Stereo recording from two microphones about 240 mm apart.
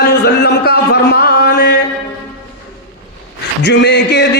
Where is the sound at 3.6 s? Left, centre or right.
Left.